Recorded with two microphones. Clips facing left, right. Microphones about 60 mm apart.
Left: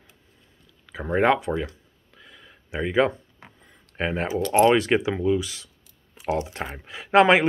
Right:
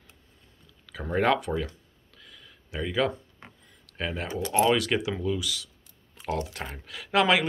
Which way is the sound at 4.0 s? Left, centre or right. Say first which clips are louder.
Left 6 dB; left.